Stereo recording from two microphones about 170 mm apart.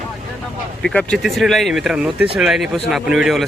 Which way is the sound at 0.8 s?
5° left (ahead or behind).